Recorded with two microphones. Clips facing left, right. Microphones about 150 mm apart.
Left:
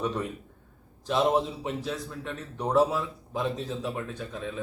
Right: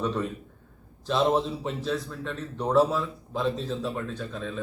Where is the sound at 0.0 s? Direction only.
15° left (ahead or behind).